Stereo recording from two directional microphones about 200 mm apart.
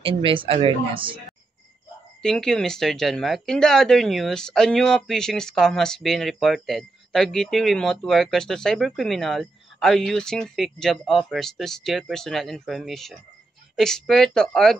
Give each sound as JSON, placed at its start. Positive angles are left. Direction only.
{"t": 0.0, "sound": "speech", "side_deg": -25}
{"t": 2.2, "sound": "speech", "side_deg": 5}